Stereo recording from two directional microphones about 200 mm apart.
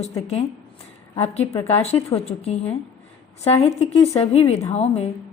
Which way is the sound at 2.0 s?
30° left (ahead or behind).